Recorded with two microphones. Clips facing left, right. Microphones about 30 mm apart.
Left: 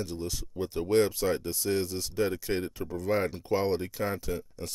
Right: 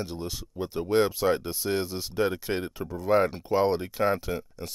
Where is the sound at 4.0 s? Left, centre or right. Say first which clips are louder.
Right 6 dB; right.